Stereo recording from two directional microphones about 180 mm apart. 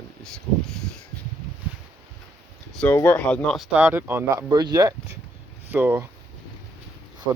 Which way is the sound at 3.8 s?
10° right (ahead or behind).